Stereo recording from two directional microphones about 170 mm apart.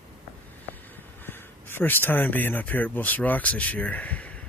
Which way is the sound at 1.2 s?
15° left (ahead or behind).